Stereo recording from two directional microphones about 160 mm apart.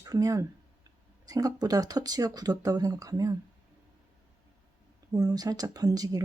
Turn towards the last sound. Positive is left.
turn(degrees=-25)  # may be behind; listen again after turning